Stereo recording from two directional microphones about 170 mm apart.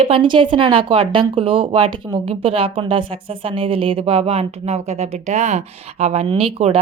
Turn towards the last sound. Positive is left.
turn(degrees=-35)  # may be behind; listen again after turning